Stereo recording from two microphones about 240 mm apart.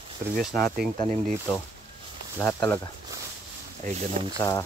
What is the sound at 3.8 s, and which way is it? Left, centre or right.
Speech, right.